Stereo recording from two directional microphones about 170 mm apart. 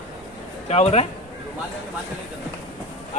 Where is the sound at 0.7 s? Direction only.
40° left (ahead or behind).